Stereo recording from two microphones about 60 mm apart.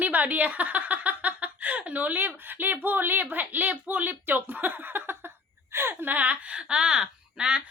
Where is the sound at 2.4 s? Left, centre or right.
Right.